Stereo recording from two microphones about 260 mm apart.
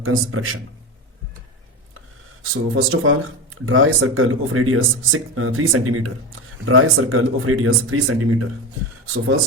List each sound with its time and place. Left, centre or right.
0.0 s speech: right
2.4 s speech: right